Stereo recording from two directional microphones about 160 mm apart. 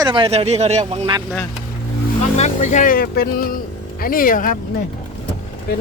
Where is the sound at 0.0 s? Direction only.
30° right (ahead or behind).